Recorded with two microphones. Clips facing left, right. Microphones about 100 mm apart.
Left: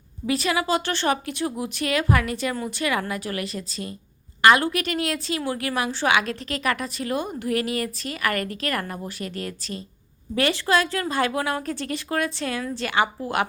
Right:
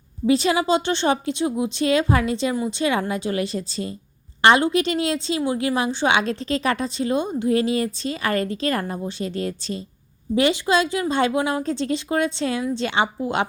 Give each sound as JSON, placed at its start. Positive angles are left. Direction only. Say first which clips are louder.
{"t": 0.3, "sound": "a woman's voice", "louder": "right 5 dB", "side_deg": -25}
{"t": 10.3, "sound": "a woman's voice", "louder": "right 3 dB", "side_deg": -20}